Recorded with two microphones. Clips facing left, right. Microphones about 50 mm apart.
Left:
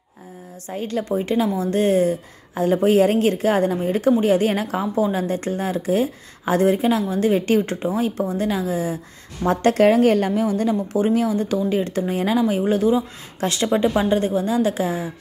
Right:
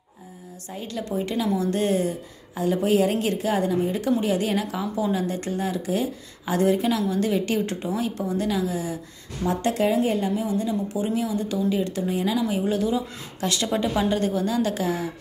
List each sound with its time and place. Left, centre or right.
0.7 s a woman's voice: left
9.4 s a woman's voice: left